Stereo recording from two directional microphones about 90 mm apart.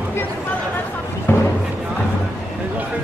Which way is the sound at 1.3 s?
25° left (ahead or behind).